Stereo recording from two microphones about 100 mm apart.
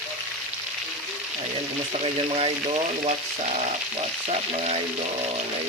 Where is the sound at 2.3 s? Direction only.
70° right (ahead or behind).